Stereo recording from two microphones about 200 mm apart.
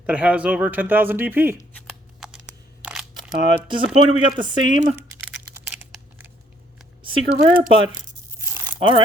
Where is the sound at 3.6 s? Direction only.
25° right (ahead or behind).